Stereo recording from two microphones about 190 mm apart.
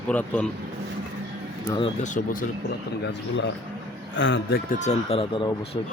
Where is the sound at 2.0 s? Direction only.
45° left (ahead or behind).